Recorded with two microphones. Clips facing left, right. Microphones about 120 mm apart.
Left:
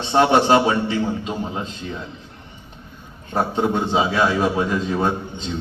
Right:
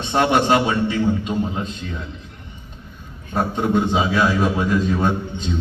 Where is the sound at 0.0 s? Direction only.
30° left (ahead or behind).